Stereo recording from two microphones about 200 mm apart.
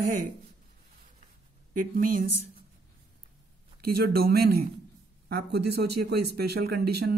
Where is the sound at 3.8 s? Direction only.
50° right (ahead or behind).